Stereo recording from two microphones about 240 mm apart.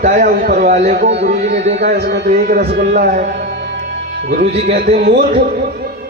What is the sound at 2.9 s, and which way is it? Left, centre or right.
Music, right.